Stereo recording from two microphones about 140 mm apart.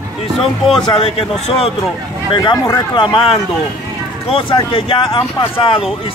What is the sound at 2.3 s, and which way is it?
Speech, 35° left (ahead or behind).